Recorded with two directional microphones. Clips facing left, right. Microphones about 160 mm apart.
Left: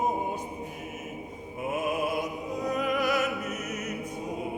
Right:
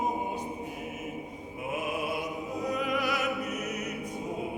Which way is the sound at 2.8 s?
45° left (ahead or behind).